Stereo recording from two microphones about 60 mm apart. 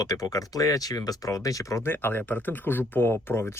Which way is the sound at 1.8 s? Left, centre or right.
Left.